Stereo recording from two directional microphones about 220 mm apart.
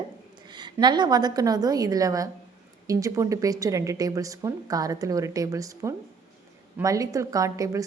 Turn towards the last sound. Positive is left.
turn(degrees=-15)  # may be behind; listen again after turning